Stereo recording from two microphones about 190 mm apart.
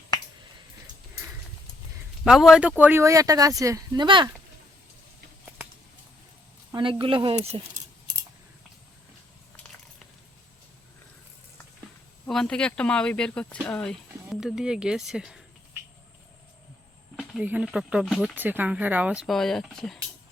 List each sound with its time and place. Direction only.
2.2 s speech: centre (ahead or behind); by 4.3 s 25° right (ahead or behind)
6.7 s speech: 25° right (ahead or behind)
12.3 s speech: 5° left (ahead or behind)
17.2 s speech: 5° right (ahead or behind)